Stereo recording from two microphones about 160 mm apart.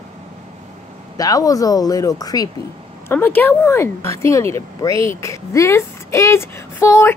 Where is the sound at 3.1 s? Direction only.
10° left (ahead or behind).